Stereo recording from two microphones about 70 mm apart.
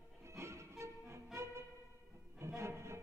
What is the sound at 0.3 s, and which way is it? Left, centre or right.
Music, right.